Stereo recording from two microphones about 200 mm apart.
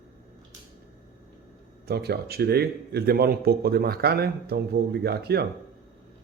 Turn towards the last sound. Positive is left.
turn(degrees=-55)  # may be behind; listen again after turning